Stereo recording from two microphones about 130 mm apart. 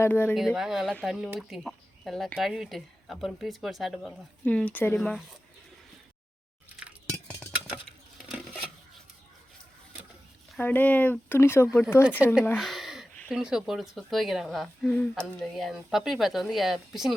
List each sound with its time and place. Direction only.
0.0 s speech: 15° left (ahead or behind)
0.3 s speech: 5° right (ahead or behind)
4.4 s speech: 10° left (ahead or behind)
4.9 s speech: 5° left (ahead or behind)
8.3 s dishes: 5° right (ahead or behind)
10.6 s speech: 15° left (ahead or behind)
12.2 s speech: 5° right (ahead or behind)
12.5 s a sound: centre (ahead or behind)
13.3 s speech: 5° right (ahead or behind)